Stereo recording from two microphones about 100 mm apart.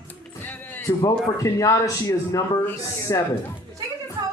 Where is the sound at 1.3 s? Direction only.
35° left (ahead or behind).